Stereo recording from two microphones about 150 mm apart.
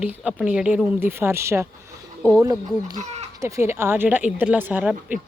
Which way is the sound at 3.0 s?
45° right (ahead or behind).